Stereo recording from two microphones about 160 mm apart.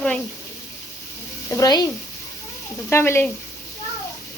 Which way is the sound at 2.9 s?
15° left (ahead or behind).